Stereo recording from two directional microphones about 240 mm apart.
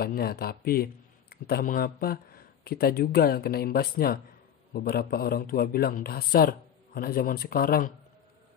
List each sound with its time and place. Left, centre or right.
0.0 s speech: left